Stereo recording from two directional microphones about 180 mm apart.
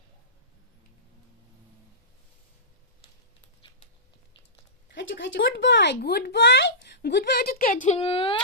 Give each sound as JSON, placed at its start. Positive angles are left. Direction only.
{"t": 4.9, "sound": "speech", "side_deg": 85}
{"t": 7.6, "sound": "speech", "side_deg": 50}